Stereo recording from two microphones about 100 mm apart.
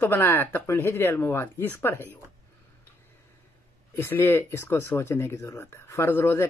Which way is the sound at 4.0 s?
25° left (ahead or behind).